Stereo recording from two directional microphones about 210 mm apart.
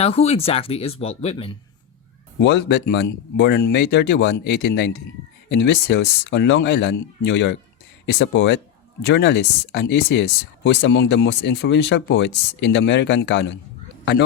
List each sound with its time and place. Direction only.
0.0 s speech: 30° left (ahead or behind)
2.4 s speech: 55° left (ahead or behind)